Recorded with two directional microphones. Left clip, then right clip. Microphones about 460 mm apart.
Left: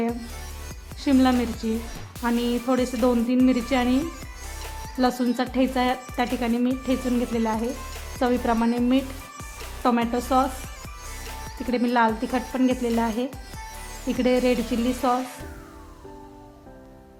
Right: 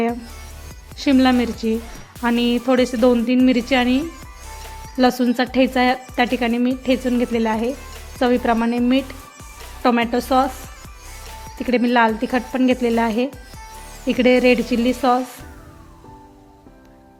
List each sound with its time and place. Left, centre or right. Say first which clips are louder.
0.9 s speech: right 5 dB; centre